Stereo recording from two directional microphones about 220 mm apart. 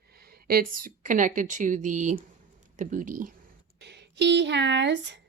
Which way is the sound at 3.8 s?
50° right (ahead or behind).